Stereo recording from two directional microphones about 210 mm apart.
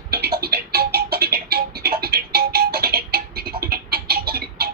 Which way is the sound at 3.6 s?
45° right (ahead or behind).